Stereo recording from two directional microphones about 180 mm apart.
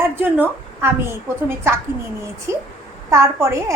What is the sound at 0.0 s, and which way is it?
A woman's voice, 10° right (ahead or behind).